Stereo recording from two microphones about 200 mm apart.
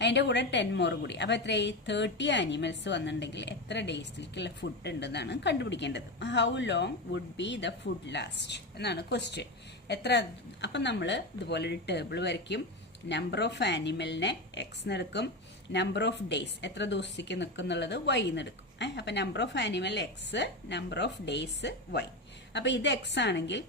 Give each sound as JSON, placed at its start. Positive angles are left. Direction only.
{"t": 0.0, "sound": "a woman's voice", "side_deg": 60}